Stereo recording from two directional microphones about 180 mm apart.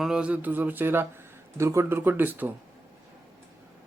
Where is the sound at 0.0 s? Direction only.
5° right (ahead or behind).